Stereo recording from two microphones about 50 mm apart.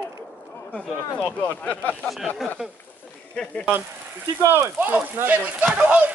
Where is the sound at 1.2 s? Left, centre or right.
Left.